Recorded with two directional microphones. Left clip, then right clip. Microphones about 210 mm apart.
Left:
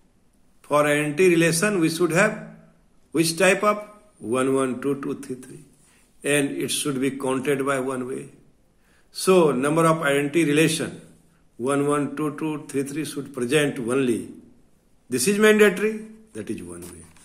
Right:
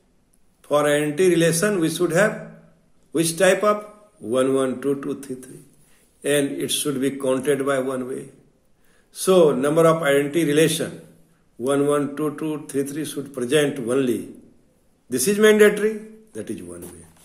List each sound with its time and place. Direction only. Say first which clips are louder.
0.6 s a man's voice: right 1 dB; 35° left (ahead or behind)